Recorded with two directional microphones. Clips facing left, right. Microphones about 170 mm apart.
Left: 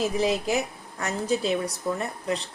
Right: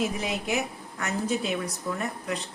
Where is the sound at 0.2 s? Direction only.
35° left (ahead or behind).